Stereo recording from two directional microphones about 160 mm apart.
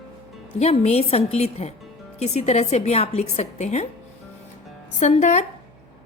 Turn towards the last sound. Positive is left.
turn(degrees=45)  # may be behind; listen again after turning